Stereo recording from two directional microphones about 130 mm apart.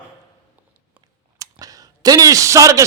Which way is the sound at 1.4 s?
25° right (ahead or behind).